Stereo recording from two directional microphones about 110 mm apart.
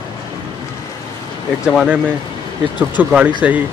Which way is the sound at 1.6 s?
10° right (ahead or behind).